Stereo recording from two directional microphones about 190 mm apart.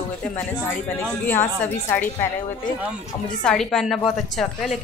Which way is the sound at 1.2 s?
10° left (ahead or behind).